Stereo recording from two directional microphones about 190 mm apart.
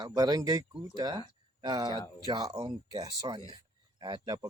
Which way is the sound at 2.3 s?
20° right (ahead or behind).